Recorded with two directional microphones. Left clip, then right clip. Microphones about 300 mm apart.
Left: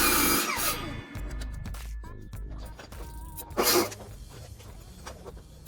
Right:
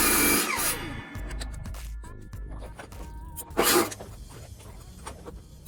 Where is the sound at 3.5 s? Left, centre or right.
Right.